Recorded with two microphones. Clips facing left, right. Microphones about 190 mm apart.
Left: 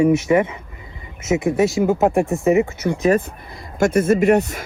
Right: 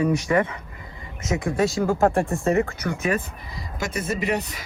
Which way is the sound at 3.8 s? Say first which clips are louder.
Left 12 dB; 50° left (ahead or behind).